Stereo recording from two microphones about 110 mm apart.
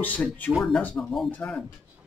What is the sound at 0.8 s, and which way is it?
Speech, 10° left (ahead or behind).